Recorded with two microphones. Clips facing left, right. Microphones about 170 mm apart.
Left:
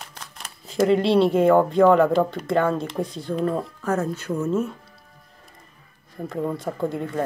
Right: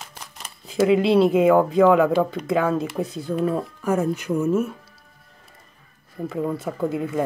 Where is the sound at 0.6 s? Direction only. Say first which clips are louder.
Right 1 dB; 5° right (ahead or behind).